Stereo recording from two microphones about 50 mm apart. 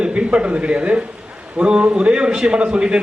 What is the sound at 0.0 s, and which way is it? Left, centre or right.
A man's voice, right.